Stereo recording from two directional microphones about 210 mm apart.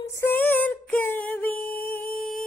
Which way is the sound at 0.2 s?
10° left (ahead or behind).